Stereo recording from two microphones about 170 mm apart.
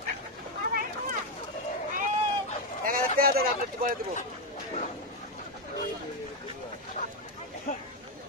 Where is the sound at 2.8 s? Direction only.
55° right (ahead or behind).